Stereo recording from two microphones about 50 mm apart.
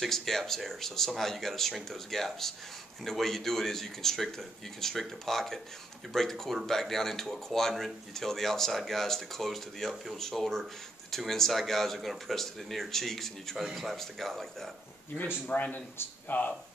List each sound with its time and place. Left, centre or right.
0.0 s speech: centre
15.5 s speech: left